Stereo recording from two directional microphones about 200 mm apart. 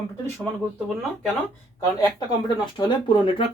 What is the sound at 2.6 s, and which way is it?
Speech, 25° left (ahead or behind).